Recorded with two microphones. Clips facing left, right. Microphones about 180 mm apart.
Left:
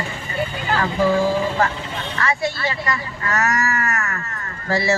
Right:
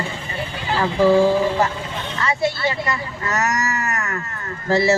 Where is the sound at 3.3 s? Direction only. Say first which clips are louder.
Left 1 dB; 20° right (ahead or behind).